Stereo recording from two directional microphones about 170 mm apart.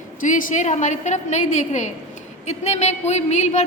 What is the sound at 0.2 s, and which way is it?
A woman's voice, 50° left (ahead or behind).